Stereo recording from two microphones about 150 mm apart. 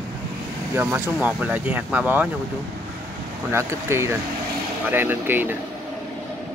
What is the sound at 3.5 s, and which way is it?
Speech, 15° right (ahead or behind).